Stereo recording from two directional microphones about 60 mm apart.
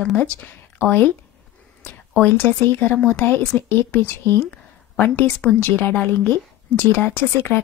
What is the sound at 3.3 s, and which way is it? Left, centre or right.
A woman's voice, left.